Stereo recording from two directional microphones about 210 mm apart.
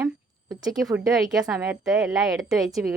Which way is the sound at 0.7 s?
Centre (ahead or behind).